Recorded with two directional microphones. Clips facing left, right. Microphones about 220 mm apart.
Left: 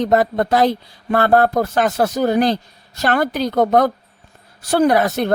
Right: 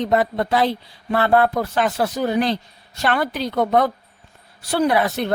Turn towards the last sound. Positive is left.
turn(degrees=45)  # may be behind; listen again after turning